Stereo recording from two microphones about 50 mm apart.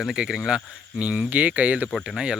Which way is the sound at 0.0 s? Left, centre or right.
Centre.